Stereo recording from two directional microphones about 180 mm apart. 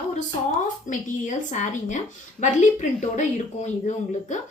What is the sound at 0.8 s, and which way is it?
A woman's voice, 45° left (ahead or behind).